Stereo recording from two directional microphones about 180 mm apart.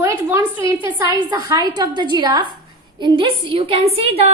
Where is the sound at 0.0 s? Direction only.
15° right (ahead or behind).